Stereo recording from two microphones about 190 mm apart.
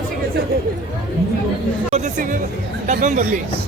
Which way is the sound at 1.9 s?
40° right (ahead or behind).